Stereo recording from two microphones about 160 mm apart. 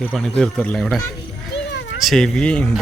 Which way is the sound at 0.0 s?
5° left (ahead or behind).